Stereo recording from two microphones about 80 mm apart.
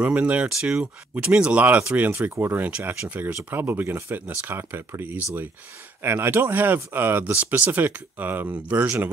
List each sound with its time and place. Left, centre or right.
0.0 s speech: centre
3.3 s speech: right